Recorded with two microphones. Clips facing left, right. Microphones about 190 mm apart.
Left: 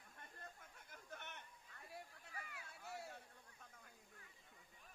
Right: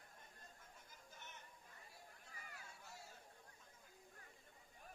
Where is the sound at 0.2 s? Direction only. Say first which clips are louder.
Left 10 dB; 65° left (ahead or behind).